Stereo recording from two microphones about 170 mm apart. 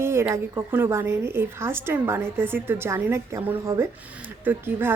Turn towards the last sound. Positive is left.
turn(degrees=-10)  # may be behind; listen again after turning